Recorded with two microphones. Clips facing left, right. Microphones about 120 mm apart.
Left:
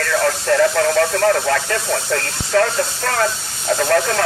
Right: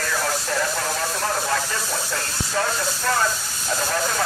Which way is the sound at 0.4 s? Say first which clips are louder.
Left 10 dB; 80° left.